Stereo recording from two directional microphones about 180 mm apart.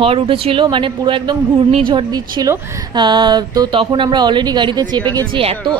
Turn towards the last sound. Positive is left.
turn(degrees=-25)  # may be behind; listen again after turning